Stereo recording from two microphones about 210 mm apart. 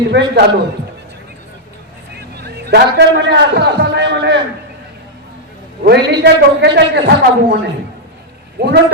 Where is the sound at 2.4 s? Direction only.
50° right (ahead or behind).